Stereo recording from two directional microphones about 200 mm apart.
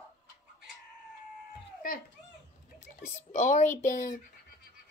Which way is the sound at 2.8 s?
35° left (ahead or behind).